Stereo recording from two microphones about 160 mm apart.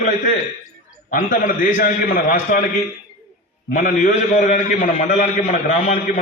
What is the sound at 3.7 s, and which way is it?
A man's voice, 55° left (ahead or behind).